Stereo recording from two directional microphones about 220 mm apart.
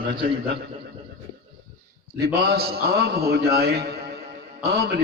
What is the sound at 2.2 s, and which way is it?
A man's voice, 45° right (ahead or behind).